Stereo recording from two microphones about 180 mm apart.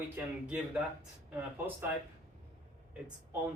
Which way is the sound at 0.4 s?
5° right (ahead or behind).